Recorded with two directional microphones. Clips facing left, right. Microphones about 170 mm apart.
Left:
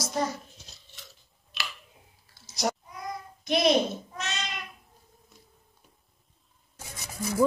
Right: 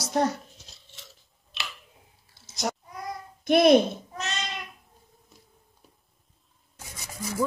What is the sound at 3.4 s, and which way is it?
Speech, 55° right (ahead or behind).